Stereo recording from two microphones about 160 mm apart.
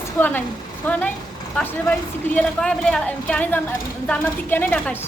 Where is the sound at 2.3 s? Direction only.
5° left (ahead or behind).